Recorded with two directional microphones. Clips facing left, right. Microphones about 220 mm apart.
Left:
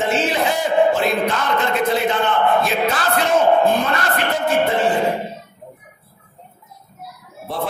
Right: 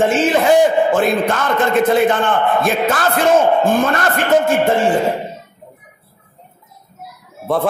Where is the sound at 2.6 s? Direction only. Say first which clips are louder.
Right 3 dB; 50° right (ahead or behind).